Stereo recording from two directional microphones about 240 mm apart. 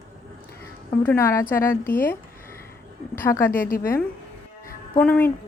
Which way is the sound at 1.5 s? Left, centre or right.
Left.